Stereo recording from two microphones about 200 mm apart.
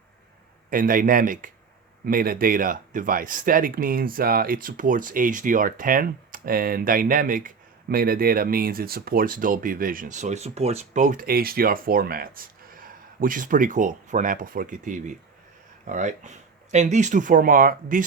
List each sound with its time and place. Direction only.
0.7 s speech: 45° right (ahead or behind)